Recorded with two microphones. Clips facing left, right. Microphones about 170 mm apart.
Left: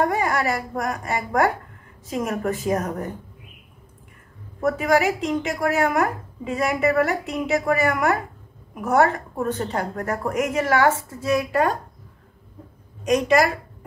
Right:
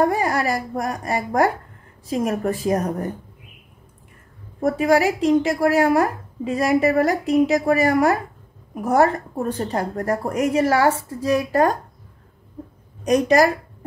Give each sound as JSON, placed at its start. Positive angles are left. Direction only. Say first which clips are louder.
{"t": 0.0, "sound": "a woman's voice", "louder": "right 2 dB", "side_deg": -35}
{"t": 4.6, "sound": "a woman's voice", "louder": "right 2 dB", "side_deg": -35}
{"t": 13.0, "sound": "a woman's voice", "louder": "right 2 dB", "side_deg": -35}